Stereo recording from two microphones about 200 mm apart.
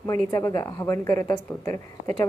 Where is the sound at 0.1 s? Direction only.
15° left (ahead or behind).